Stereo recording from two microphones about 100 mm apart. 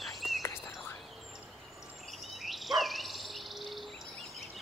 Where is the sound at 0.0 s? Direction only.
Centre (ahead or behind).